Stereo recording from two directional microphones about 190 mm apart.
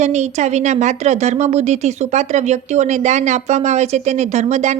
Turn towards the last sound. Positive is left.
turn(degrees=-35)  # may be behind; listen again after turning